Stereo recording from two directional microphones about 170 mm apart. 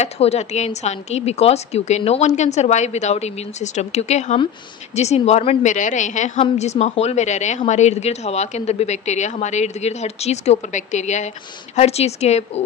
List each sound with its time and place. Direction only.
0.0 s a woman's voice: 40° left (ahead or behind)